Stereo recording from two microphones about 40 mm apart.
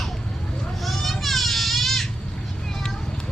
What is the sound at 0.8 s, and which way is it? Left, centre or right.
Goat, centre.